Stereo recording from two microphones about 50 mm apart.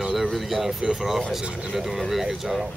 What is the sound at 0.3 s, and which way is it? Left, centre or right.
Speech, centre.